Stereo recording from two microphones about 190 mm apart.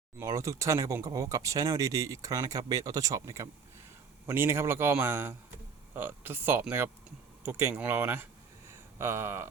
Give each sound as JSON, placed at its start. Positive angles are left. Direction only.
{"t": 0.2, "sound": "speech", "side_deg": -15}